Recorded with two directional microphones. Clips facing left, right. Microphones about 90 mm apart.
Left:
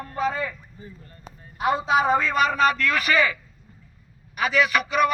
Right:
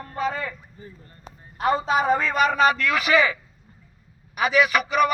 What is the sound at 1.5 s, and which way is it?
A man's voice, 5° left (ahead or behind).